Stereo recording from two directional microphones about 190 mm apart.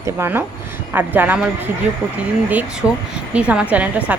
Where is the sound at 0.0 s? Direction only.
10° right (ahead or behind).